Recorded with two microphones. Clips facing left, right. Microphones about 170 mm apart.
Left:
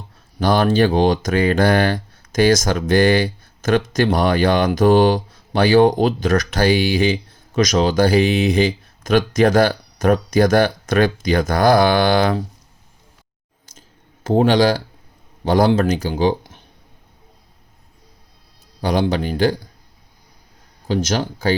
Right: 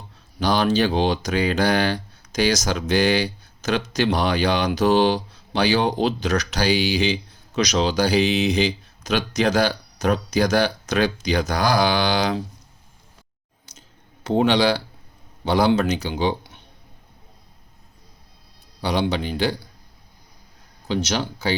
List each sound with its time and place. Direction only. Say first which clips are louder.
0.3 s speech: left 4 dB; 50° left (ahead or behind)
14.3 s speech: left 4 dB; 45° left (ahead or behind)
18.8 s speech: left 4 dB; 50° left (ahead or behind)
20.8 s speech: left 4 dB; 45° left (ahead or behind)